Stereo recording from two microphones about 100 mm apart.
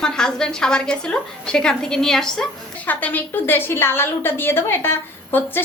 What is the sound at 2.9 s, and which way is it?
A woman's voice, 15° left (ahead or behind).